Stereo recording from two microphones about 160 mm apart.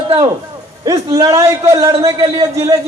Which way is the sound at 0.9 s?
20° right (ahead or behind).